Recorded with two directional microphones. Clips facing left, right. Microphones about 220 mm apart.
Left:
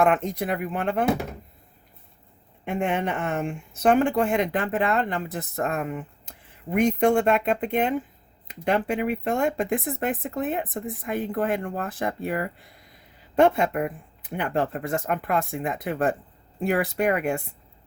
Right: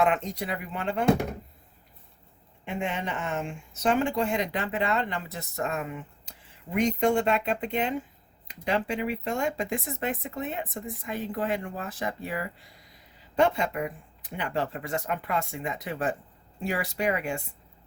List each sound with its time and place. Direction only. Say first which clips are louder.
0.0 s speech: left 4 dB; 50° left (ahead or behind)
2.6 s speech: left 6 dB; 55° left (ahead or behind)